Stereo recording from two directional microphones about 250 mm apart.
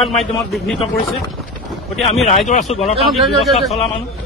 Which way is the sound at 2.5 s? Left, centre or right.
Left.